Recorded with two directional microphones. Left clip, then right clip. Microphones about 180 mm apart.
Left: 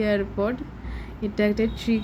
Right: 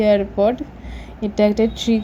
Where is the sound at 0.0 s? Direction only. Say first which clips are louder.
Right 9 dB; 20° right (ahead or behind).